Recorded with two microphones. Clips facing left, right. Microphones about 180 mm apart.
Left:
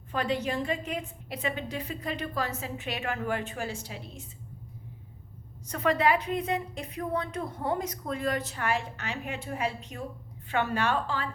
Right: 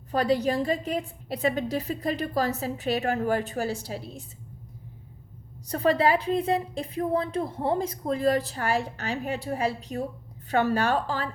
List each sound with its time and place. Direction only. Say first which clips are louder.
0.1 s a woman's voice: right 6 dB; 35° right (ahead or behind)
5.6 s a woman's voice: right 3 dB; 35° right (ahead or behind)